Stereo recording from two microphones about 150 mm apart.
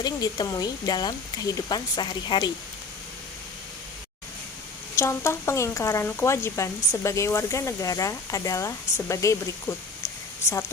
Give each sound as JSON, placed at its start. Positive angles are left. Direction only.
{"t": 0.0, "sound": "speech", "side_deg": 25}
{"t": 4.9, "sound": "speech", "side_deg": 20}